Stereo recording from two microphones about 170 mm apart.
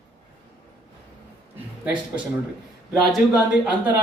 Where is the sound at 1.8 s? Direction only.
10° right (ahead or behind).